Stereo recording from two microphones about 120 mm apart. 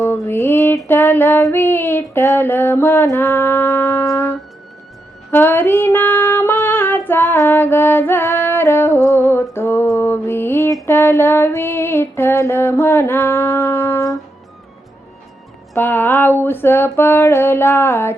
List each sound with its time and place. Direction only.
0.0 s mantra: 20° left (ahead or behind)
0.9 s female singing: 15° left (ahead or behind)
10.8 s a sound: 20° left (ahead or behind)
15.7 s female singing: 15° left (ahead or behind)